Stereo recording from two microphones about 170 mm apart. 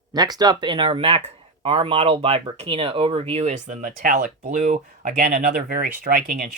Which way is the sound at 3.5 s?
50° right (ahead or behind).